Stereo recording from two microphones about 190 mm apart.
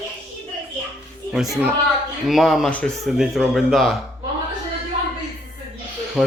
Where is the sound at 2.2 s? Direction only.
Centre (ahead or behind).